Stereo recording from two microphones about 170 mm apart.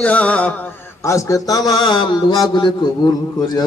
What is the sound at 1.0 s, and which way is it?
A man's voice, 20° left (ahead or behind).